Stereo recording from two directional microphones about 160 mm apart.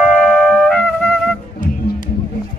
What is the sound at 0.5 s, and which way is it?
Music, 5° left (ahead or behind).